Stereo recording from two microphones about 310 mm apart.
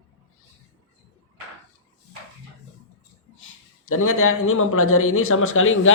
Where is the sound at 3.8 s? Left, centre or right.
Left.